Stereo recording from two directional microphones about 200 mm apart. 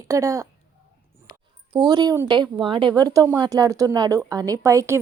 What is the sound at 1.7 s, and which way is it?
Speech, 20° right (ahead or behind).